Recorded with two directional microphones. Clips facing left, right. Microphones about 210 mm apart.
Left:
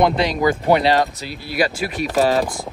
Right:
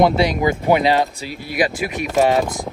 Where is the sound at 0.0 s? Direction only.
10° right (ahead or behind).